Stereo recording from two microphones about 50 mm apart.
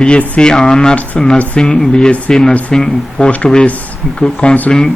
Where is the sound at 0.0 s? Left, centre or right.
Centre.